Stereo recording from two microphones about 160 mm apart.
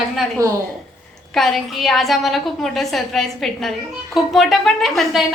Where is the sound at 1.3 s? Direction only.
Centre (ahead or behind).